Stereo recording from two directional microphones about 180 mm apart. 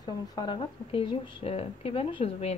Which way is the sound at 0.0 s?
25° left (ahead or behind).